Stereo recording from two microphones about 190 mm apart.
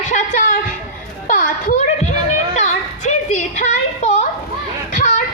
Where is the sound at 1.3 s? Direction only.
45° left (ahead or behind).